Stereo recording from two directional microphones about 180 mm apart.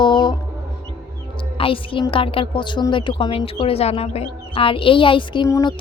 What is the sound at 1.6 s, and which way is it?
A woman's voice, 30° left (ahead or behind).